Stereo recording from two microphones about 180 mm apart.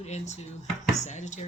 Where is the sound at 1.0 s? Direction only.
40° left (ahead or behind).